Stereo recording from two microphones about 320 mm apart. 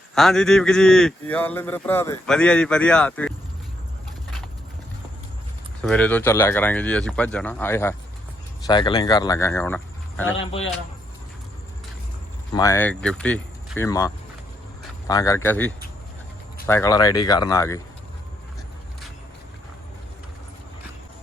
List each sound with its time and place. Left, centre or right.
0.1 s speech: centre
5.8 s speech: centre
10.3 s speech: centre
12.5 s speech: centre